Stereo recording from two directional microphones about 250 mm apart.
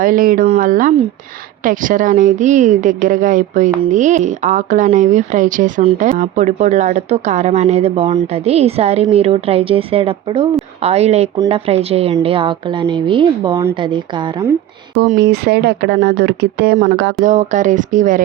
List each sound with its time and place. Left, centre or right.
0.0 s speech: right; by 14.5 s centre
15.1 s speech: right
17.2 s speech: right